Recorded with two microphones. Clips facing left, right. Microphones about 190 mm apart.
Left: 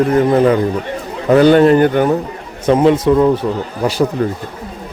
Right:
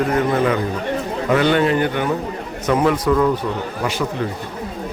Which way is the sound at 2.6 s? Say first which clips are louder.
Left 6 dB; 25° left (ahead or behind).